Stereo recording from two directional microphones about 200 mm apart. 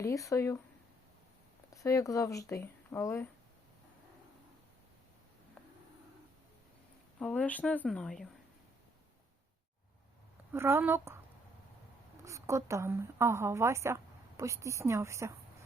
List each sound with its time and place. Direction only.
0.0 s speech: 15° left (ahead or behind)
1.7 s speech: 15° left (ahead or behind)
7.2 s speech: 5° left (ahead or behind)
10.5 s a woman's voice: 10° right (ahead or behind)
12.2 s a woman's voice: 15° right (ahead or behind)